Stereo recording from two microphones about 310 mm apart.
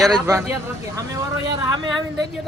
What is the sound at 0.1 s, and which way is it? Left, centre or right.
Speech, centre.